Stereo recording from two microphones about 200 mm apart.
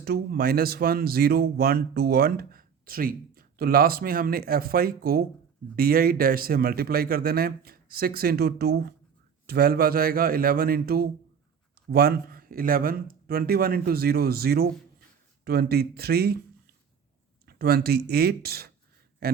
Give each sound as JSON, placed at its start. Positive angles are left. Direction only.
{"t": 0.0, "sound": "speech", "side_deg": -50}
{"t": 17.4, "sound": "speech", "side_deg": -50}